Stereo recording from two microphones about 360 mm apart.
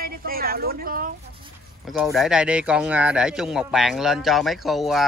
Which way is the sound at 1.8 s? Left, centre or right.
Centre.